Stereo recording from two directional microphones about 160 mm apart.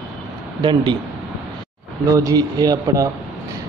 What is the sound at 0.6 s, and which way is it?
Speech, 30° right (ahead or behind).